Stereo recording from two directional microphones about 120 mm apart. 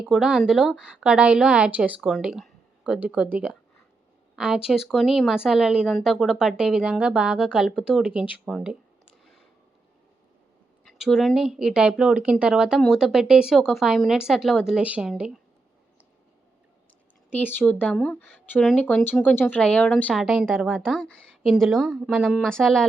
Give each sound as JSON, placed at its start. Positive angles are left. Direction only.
{"t": 0.0, "sound": "a woman's voice", "side_deg": -5}
{"t": 10.8, "sound": "speech", "side_deg": 0}
{"t": 17.3, "sound": "speech", "side_deg": 15}